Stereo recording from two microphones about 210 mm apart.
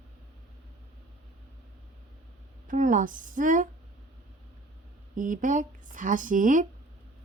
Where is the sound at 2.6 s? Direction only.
40° right (ahead or behind).